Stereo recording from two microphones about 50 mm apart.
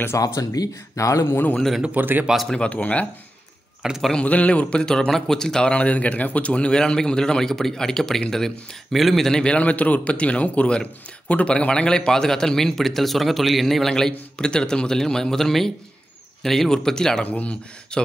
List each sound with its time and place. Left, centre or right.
0.1 s speech: left
1.2 s a man's voice: left
2.0 s a man's voice: right
2.5 s speech: left
3.8 s a man's voice: centre
4.2 s a man's voice: left; by 5.7 s centre
5.7 s a man's voice: left; by 9.4 s centre
9.4 s a man's voice: left
17.2 s speech: left